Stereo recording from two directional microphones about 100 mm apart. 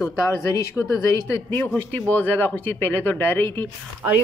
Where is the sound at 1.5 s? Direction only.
20° left (ahead or behind).